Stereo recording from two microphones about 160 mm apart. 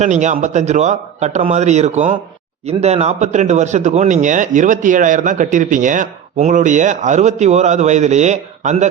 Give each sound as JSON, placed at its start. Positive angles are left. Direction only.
{"t": 0.0, "sound": "speech", "side_deg": -50}